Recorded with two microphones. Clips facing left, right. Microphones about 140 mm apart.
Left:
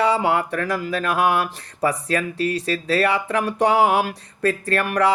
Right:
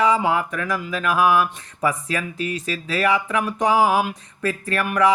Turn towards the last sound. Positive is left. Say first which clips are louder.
# even
turn(degrees=35)  # may be behind; listen again after turning